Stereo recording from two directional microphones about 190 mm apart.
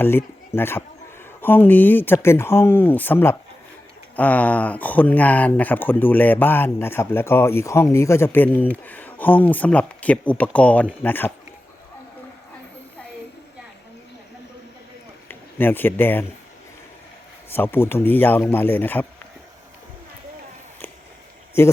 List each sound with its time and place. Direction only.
0.0 s speech: 10° left (ahead or behind)
15.3 s speech: 10° left (ahead or behind)
17.5 s speech: 10° left (ahead or behind)
21.6 s speech: 15° left (ahead or behind)